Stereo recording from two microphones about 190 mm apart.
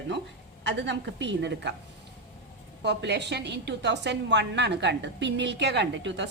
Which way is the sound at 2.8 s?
65° right (ahead or behind).